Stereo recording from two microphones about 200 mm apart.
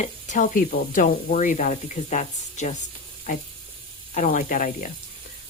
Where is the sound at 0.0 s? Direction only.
40° left (ahead or behind).